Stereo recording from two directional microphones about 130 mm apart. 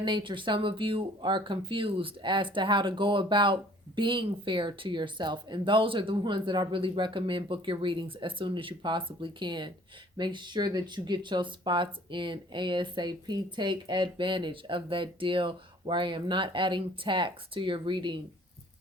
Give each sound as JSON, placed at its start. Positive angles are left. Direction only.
{"t": 0.0, "sound": "speech", "side_deg": -40}